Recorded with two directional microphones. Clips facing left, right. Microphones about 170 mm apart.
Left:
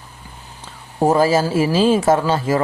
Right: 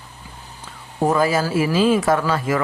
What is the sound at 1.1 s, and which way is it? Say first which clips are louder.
Speech: left 3 dB; 30° left (ahead or behind).